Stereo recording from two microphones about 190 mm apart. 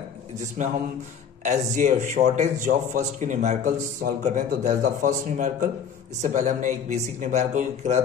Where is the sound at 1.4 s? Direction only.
40° right (ahead or behind).